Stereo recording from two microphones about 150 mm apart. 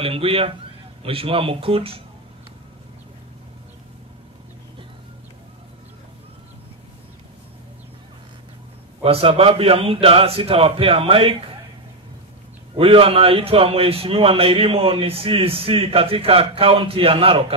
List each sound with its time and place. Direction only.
0.0 s a man's voice: 40° right (ahead or behind)
9.0 s a man's voice: 40° right (ahead or behind)
12.7 s a man's voice: 40° right (ahead or behind)